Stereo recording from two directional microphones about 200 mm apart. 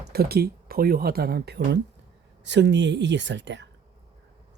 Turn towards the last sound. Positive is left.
turn(degrees=-60)  # may be behind; listen again after turning